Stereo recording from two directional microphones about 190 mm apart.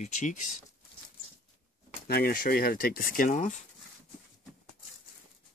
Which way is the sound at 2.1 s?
55° left (ahead or behind).